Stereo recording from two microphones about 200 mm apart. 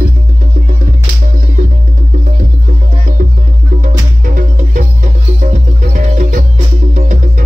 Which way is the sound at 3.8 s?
40° right (ahead or behind).